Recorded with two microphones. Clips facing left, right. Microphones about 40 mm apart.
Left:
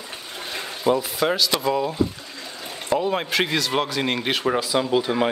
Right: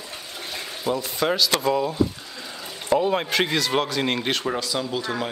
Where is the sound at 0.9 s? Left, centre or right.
Centre.